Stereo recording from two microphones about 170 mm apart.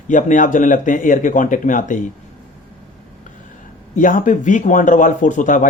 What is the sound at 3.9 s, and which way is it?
Speech, 50° left (ahead or behind).